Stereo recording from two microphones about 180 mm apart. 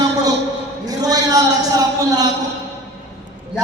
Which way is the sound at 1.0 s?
20° right (ahead or behind).